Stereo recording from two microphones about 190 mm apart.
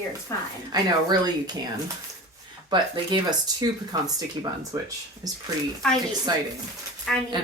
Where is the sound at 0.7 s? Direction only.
20° right (ahead or behind).